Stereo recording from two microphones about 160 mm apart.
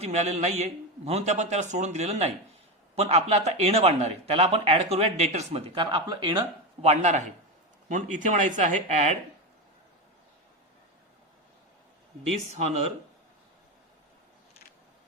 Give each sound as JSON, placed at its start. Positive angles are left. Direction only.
{"t": 0.0, "sound": "a man's voice", "side_deg": -40}
{"t": 6.8, "sound": "a man's voice", "side_deg": -45}